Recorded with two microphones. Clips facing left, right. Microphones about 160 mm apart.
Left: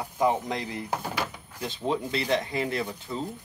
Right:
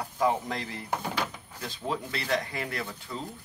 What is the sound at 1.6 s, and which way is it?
Speech, 20° left (ahead or behind).